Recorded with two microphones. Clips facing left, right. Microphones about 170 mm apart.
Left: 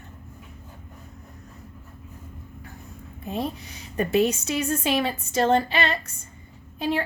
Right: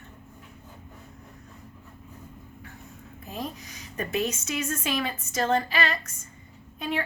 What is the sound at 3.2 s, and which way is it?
A woman's voice, 30° left (ahead or behind).